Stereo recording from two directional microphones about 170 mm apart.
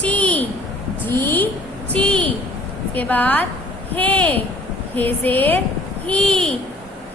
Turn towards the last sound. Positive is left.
turn(degrees=5)  # may be behind; listen again after turning